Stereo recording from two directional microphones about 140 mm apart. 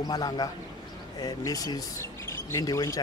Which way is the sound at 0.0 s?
30° left (ahead or behind).